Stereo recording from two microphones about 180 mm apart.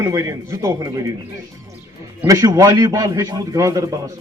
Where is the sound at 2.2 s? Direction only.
20° right (ahead or behind).